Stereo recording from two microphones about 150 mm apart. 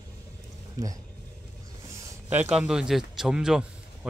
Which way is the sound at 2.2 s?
10° right (ahead or behind).